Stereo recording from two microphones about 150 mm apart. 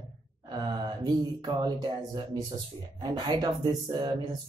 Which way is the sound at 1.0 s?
25° right (ahead or behind).